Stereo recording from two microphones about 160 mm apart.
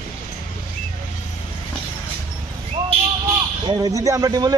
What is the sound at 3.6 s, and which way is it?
Speech, 25° right (ahead or behind).